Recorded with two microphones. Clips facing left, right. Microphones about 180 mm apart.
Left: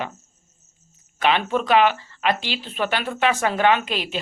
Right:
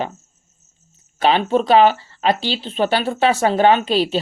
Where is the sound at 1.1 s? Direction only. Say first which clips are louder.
Right 5 dB; 30° right (ahead or behind).